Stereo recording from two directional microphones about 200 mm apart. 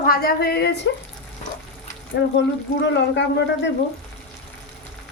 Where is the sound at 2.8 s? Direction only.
60° left (ahead or behind).